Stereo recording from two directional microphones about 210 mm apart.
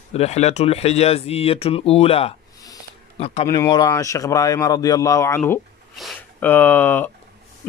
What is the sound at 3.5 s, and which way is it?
A man's voice, 15° left (ahead or behind).